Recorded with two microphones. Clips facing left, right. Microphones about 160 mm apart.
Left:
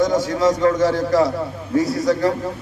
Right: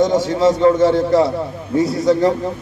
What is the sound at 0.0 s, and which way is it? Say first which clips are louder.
A man's voice: right 3 dB; 25° right (ahead or behind).